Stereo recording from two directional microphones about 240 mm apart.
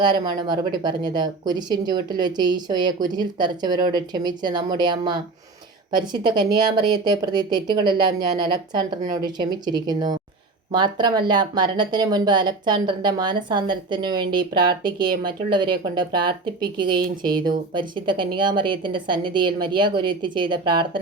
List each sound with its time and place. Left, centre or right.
0.0 s speech: centre
17.3 s speech: right
17.7 s speech: centre